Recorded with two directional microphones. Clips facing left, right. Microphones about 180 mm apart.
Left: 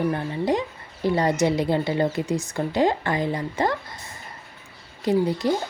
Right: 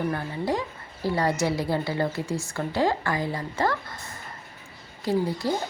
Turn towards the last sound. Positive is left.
turn(degrees=20)  # may be behind; listen again after turning